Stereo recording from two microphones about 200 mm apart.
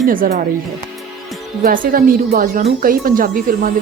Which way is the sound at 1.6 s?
45° right (ahead or behind).